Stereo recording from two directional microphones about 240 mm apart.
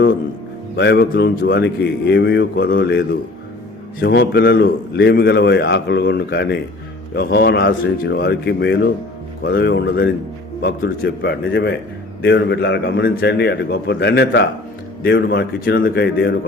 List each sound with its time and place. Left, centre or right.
0.8 s a man's voice: left